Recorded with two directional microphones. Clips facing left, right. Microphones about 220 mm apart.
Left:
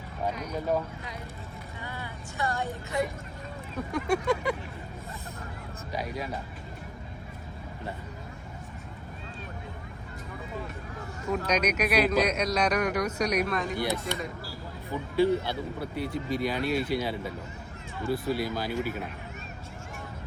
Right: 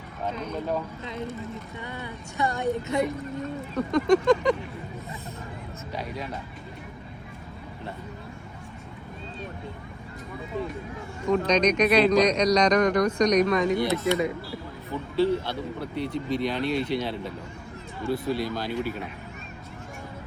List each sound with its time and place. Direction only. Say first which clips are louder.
1.8 s speech: right 3 dB; 20° right (ahead or behind)
3.8 s speech: right 7 dB; 10° left (ahead or behind)
5.9 s speech: left 1 dB; 10° left (ahead or behind)
11.3 s speech: right 6 dB; 10° left (ahead or behind)